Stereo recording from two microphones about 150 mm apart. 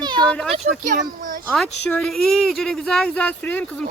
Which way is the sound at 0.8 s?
60° right (ahead or behind).